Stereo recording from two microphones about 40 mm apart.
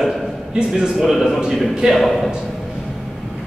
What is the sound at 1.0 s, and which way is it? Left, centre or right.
Speech, centre.